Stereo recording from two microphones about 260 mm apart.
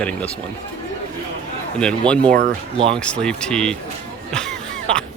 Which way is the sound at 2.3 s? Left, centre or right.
Right.